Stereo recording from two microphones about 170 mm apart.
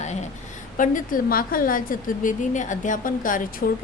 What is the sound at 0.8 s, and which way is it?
A woman's voice, 50° left (ahead or behind).